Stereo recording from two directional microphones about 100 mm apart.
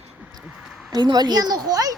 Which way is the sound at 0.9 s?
45° right (ahead or behind).